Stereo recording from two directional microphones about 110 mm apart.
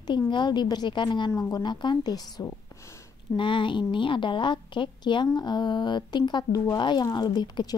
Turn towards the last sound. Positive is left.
turn(degrees=40)  # may be behind; listen again after turning